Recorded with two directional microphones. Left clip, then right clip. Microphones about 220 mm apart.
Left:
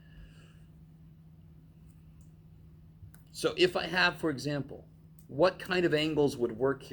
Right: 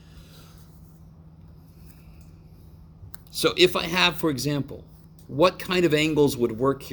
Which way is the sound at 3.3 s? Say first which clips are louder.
Right 8 dB; 40° right (ahead or behind).